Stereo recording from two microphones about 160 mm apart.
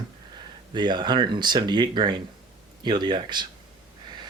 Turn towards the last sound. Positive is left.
turn(degrees=-30)  # may be behind; listen again after turning